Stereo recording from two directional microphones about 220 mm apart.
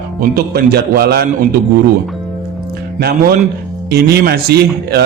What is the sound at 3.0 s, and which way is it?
A man's voice, 45° right (ahead or behind).